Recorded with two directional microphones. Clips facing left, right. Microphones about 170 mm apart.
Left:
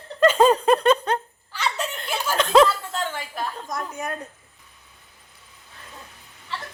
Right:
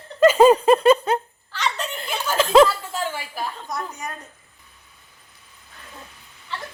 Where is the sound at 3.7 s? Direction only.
45° left (ahead or behind).